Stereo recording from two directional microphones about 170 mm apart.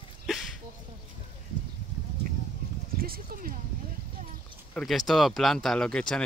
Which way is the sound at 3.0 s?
55° right (ahead or behind).